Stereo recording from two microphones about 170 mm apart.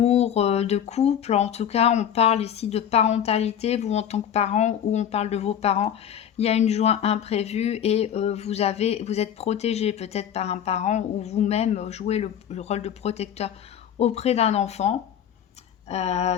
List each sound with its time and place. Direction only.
0.0 s speech: 40° left (ahead or behind)